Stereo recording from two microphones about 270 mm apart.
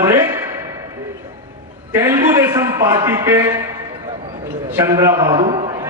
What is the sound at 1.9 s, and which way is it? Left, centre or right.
A man's voice, centre.